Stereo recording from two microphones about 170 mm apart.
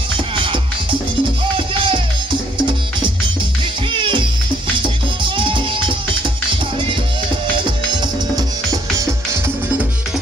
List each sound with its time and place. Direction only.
1.7 s music: 30° right (ahead or behind)
3.9 s music: 30° right (ahead or behind)
7.5 s music: 25° right (ahead or behind)
8.9 s music: 15° right (ahead or behind)